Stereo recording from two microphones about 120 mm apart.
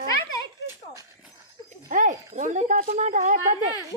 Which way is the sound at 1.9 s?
90° right.